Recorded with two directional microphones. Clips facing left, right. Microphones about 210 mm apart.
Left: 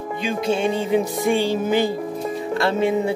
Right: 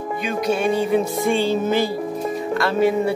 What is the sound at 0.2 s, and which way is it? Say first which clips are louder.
Music: even; 25° left (ahead or behind).